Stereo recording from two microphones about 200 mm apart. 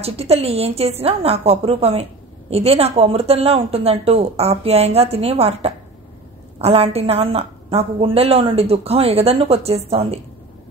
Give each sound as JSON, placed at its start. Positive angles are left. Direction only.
{"t": 0.0, "sound": "a woman's voice", "side_deg": -30}